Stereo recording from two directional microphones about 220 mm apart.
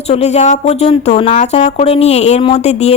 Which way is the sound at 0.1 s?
30° left (ahead or behind).